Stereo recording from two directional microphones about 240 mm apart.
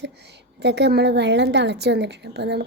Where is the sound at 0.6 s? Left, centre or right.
Right.